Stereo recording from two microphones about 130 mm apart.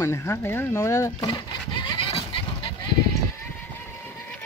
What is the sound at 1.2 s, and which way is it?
Goat, 40° left (ahead or behind).